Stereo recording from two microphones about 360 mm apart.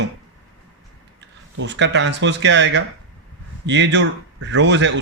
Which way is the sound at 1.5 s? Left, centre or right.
Right.